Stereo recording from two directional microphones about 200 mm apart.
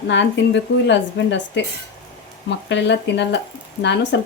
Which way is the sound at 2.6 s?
60° left (ahead or behind).